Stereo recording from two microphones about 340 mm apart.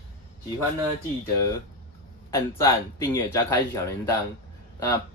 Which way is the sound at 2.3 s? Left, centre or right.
Centre.